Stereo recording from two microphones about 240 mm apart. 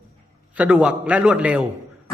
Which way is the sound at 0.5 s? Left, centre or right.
Centre.